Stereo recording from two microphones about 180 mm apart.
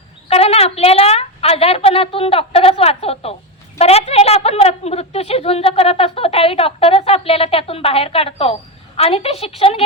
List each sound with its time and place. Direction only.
0.3 s a woman's voice: 35° left (ahead or behind)